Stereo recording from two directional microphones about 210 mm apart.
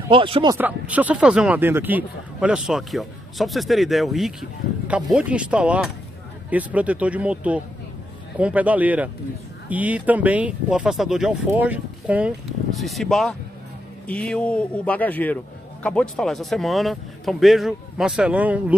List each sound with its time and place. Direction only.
0.1 s speech: 25° right (ahead or behind)
0.6 s speech: 5° right (ahead or behind)